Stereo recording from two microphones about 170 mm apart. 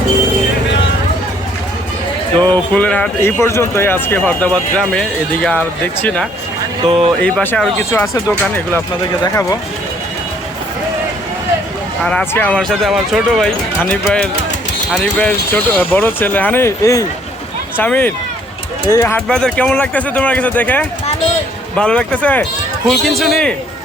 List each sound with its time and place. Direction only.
2.4 s speech: 10° left (ahead or behind)
6.8 s speech: 30° right (ahead or behind)
7.2 s speech: 10° left (ahead or behind)
12.0 s speech: 10° left (ahead or behind)
19.3 s speech: 5° left (ahead or behind)